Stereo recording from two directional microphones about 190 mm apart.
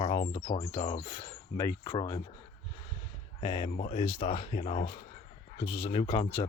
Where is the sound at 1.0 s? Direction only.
20° left (ahead or behind).